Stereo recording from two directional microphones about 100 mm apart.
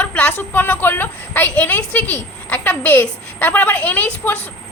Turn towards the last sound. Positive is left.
turn(degrees=15)  # may be behind; listen again after turning